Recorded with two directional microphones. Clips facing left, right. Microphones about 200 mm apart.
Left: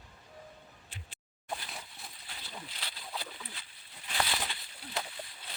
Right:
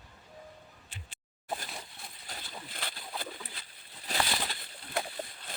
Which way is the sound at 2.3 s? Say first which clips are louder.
Right 2 dB; 50° right (ahead or behind).